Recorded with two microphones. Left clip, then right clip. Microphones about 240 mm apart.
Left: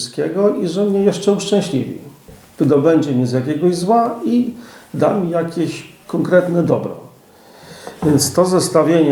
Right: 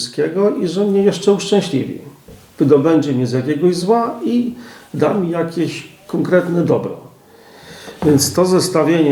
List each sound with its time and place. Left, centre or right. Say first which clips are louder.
0.0 s a man's voice: right 1 dB; centre